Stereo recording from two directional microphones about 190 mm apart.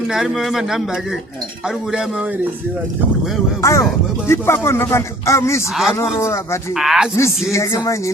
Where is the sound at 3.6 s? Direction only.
15° left (ahead or behind).